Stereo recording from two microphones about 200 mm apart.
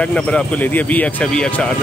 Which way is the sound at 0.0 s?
5° left (ahead or behind).